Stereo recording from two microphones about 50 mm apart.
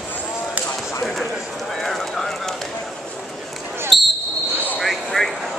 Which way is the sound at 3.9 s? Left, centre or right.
Centre.